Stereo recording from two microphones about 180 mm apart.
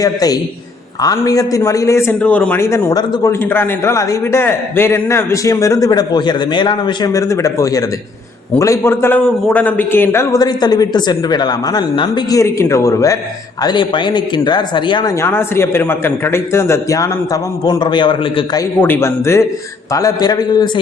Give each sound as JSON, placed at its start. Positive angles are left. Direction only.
{"t": 0.0, "sound": "a man's voice", "side_deg": 20}
{"t": 15.2, "sound": "a man's voice", "side_deg": 15}
{"t": 18.8, "sound": "a man's voice", "side_deg": 15}